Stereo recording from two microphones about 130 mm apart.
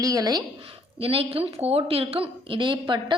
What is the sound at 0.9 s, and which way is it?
A woman's voice, 50° right (ahead or behind).